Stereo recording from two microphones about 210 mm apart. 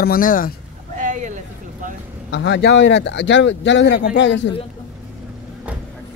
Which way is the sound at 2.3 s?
55° left (ahead or behind).